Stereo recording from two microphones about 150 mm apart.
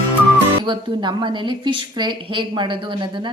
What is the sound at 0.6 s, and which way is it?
A woman's voice, 30° right (ahead or behind).